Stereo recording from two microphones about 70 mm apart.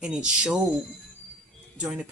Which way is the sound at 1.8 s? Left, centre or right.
Centre.